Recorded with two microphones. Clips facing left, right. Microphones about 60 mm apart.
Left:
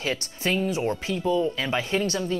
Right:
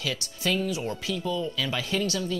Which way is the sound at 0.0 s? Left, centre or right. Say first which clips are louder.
Left 3 dB; left.